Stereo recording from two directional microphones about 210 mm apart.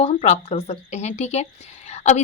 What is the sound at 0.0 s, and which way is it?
A woman's voice, 30° left (ahead or behind).